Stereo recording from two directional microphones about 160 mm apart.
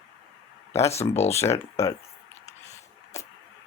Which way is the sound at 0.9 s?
40° left (ahead or behind).